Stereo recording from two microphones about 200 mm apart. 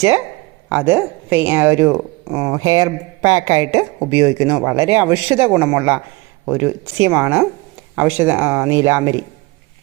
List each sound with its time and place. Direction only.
0.7 s speech: 10° right (ahead or behind)